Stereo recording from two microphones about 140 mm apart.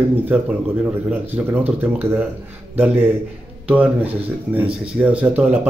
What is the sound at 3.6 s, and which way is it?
Speech, 10° right (ahead or behind).